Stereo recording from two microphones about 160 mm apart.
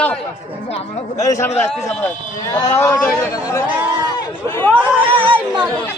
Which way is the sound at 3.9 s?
25° right (ahead or behind).